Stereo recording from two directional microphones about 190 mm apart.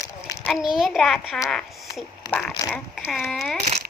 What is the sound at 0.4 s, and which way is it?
Speech, centre (ahead or behind).